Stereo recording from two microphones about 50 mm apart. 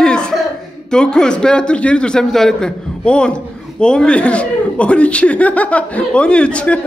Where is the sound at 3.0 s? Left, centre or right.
Centre.